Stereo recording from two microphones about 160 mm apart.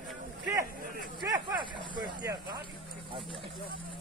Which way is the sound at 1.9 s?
25° right (ahead or behind).